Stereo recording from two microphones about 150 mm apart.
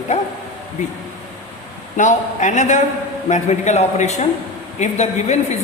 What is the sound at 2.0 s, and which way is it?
A man's voice, 55° left (ahead or behind).